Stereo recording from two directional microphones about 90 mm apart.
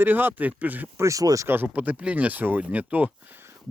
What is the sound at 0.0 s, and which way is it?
Speech, 20° right (ahead or behind).